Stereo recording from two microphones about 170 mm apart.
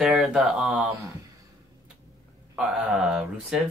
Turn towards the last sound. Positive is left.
turn(degrees=-5)  # may be behind; listen again after turning